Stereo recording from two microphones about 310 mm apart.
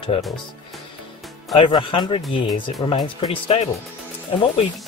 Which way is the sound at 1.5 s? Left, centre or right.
Centre.